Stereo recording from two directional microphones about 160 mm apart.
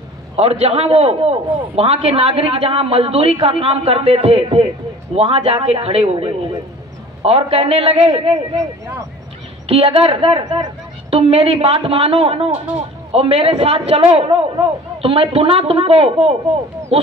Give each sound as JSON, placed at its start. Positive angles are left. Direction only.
{"t": 0.4, "sound": "a man's voice", "side_deg": -40}
{"t": 9.7, "sound": "a man's voice", "side_deg": -35}